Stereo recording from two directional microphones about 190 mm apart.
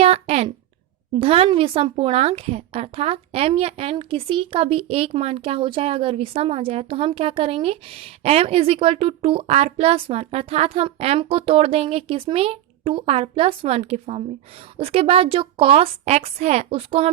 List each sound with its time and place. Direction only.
0.0 s speech: 35° right (ahead or behind)